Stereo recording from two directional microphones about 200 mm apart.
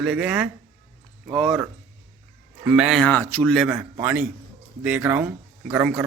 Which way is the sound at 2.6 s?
5° right (ahead or behind).